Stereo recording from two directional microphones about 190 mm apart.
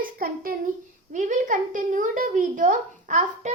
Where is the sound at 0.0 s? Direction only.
50° right (ahead or behind).